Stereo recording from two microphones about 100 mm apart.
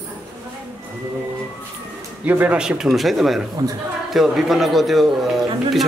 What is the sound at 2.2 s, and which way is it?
A man's voice, 15° right (ahead or behind).